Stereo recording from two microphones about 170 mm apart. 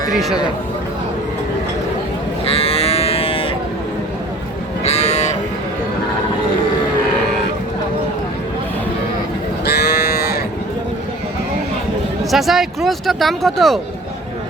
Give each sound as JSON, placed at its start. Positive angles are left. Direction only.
{"t": 0.1, "sound": "speech", "side_deg": 0}
{"t": 2.5, "sound": "livestock", "side_deg": 35}
{"t": 4.8, "sound": "livestock", "side_deg": 40}
{"t": 9.6, "sound": "moo", "side_deg": 70}
{"t": 12.3, "sound": "speech", "side_deg": 0}